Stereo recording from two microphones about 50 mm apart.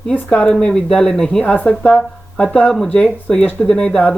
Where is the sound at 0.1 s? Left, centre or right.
Left.